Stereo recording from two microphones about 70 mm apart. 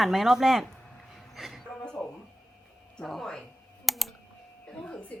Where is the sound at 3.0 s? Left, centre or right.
Centre.